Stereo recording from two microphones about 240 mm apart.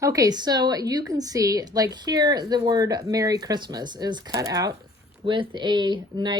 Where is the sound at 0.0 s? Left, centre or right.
Centre.